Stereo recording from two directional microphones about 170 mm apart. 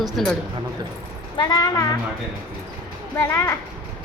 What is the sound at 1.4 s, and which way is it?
Speech, 25° left (ahead or behind).